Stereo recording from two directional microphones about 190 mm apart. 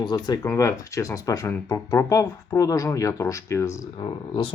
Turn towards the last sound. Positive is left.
turn(degrees=25)  # may be behind; listen again after turning